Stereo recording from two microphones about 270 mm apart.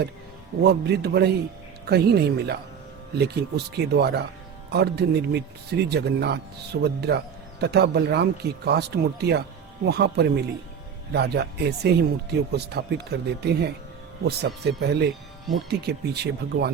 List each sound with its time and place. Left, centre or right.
0.6 s speech: right